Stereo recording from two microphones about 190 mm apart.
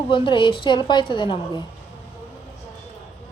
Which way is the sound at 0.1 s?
25° left (ahead or behind).